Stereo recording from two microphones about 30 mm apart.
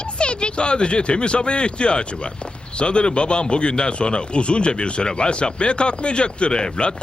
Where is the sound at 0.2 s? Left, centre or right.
Left.